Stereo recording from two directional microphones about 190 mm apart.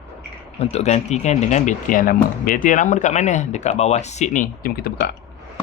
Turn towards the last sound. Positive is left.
turn(degrees=50)  # may be behind; listen again after turning